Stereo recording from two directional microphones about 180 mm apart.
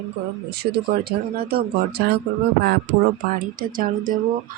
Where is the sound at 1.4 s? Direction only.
60° right (ahead or behind).